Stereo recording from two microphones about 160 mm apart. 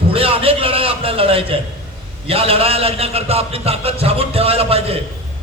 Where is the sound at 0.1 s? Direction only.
35° right (ahead or behind).